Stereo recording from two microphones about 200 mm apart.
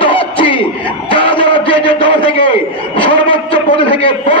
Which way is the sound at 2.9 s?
25° left (ahead or behind).